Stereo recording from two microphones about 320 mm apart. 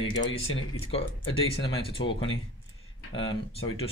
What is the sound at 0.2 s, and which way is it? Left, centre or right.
Speech, left.